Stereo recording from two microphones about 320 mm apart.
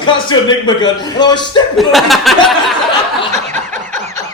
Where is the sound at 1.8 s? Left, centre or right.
Centre.